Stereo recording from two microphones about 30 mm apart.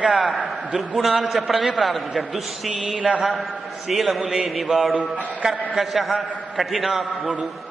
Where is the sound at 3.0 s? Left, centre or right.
Right.